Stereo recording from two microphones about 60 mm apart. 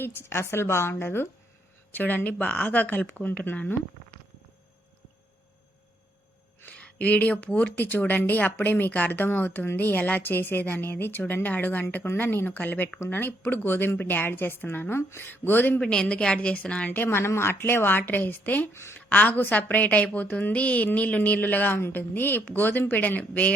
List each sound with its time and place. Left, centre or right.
0.0 s a woman's voice: left
2.0 s a woman's voice: left
6.7 s a woman's voice: left
15.8 s a woman's voice: centre
16.9 s a woman's voice: left
18.7 s a woman's voice: left
18.9 s a woman's voice: left